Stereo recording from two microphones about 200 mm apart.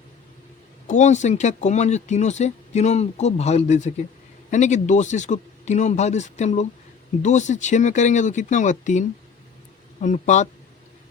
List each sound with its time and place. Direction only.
0.9 s speech: 35° left (ahead or behind)